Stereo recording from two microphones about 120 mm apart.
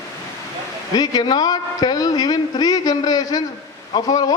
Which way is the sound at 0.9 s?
35° left (ahead or behind).